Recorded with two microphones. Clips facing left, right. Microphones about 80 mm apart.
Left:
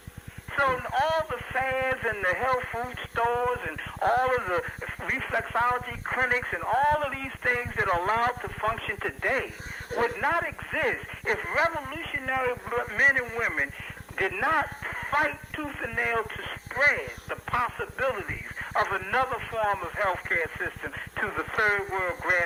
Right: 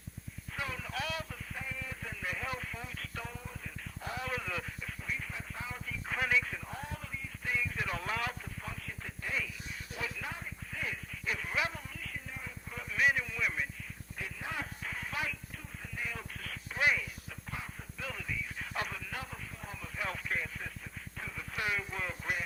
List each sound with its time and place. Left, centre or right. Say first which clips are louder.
0.5 s speech: left 14 dB; left
5.0 s speech: left 13 dB; left
8.6 s speech: left 18 dB; left
14.2 s speech: left 15 dB; left
17.2 s speech: left 16 dB; left